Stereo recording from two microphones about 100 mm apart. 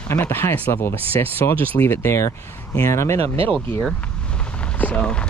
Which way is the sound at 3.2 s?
80° right.